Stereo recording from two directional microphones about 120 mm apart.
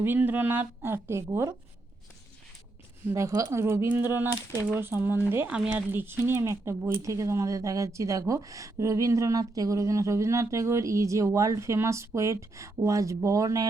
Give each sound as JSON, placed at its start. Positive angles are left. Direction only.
{"t": 0.0, "sound": "speech", "side_deg": -15}
{"t": 3.1, "sound": "speech", "side_deg": -25}